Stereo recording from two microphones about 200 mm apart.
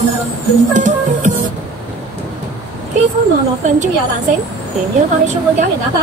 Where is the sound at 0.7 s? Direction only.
40° right (ahead or behind).